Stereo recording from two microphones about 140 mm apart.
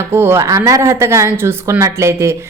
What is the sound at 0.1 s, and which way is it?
A woman's voice, 15° right (ahead or behind).